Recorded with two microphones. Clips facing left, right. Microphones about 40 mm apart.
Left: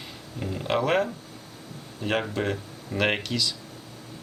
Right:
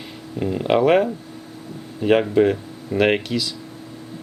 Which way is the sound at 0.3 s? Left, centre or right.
Centre.